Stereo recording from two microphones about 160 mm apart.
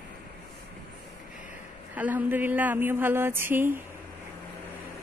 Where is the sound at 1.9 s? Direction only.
10° right (ahead or behind).